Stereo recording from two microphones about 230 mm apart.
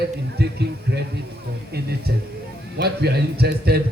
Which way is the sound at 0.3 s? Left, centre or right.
Right.